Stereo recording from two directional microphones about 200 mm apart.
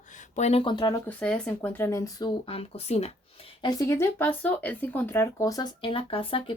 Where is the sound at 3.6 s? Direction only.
20° left (ahead or behind).